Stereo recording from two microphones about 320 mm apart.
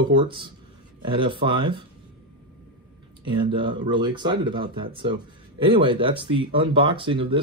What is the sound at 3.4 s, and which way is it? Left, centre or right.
Speech, centre.